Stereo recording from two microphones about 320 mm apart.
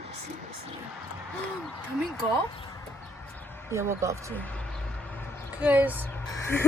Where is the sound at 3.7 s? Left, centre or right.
Centre.